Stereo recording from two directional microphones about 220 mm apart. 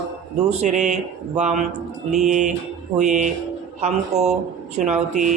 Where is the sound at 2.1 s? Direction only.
35° right (ahead or behind).